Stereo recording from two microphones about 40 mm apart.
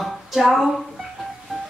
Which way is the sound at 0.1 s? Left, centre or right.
Centre.